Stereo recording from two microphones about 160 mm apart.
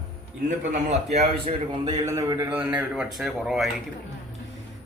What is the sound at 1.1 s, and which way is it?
Speech, 40° right (ahead or behind).